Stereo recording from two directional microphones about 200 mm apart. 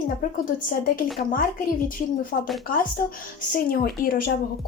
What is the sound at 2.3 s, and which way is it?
A woman's voice, 50° left (ahead or behind).